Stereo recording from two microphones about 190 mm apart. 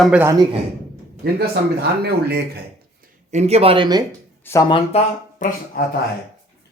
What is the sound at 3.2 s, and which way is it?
Speech, 35° right (ahead or behind).